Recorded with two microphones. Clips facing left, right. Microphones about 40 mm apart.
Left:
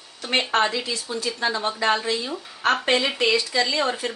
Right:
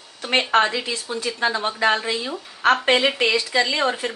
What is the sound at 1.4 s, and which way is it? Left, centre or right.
A woman's voice, right.